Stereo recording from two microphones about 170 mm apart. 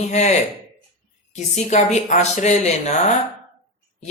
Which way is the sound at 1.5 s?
45° left (ahead or behind).